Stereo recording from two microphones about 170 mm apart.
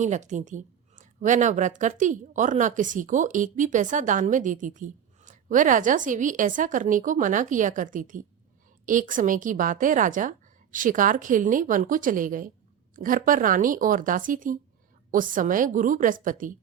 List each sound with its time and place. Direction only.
0.0 s a woman's voice: 45° right (ahead or behind)